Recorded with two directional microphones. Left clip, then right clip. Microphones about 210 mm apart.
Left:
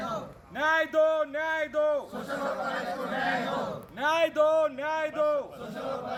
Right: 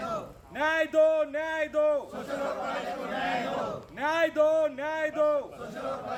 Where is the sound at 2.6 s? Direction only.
10° left (ahead or behind).